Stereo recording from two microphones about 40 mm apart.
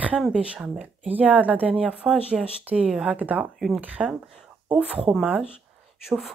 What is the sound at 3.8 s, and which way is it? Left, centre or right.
Speech, right.